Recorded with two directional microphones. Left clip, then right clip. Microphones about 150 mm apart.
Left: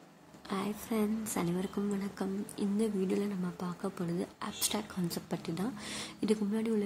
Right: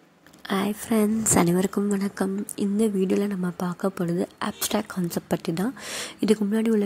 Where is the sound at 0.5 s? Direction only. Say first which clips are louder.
Right 11 dB; 40° right (ahead or behind).